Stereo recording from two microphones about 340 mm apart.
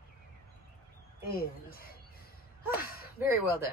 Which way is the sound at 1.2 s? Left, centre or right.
Left.